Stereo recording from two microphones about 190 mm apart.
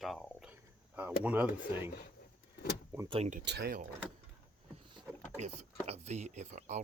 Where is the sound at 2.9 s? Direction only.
25° right (ahead or behind).